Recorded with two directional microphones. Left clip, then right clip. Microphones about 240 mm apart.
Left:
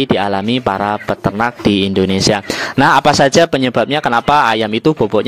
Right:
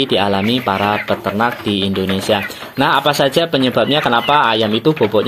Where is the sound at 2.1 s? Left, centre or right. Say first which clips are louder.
Left 2 dB; left.